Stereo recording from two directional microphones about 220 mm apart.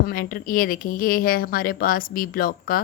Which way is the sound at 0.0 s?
40° left (ahead or behind).